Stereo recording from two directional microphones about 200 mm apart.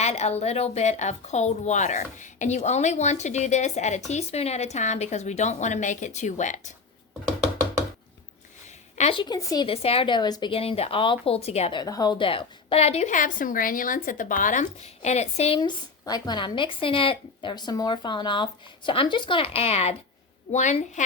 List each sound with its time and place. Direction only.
0.0 s a woman's voice: 35° left (ahead or behind)
9.0 s a woman's voice: 30° left (ahead or behind)